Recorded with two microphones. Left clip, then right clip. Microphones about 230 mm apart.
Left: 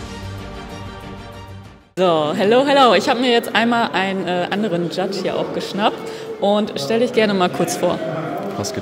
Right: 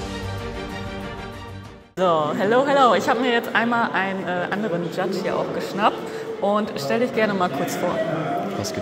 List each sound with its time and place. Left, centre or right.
2.0 s speech: left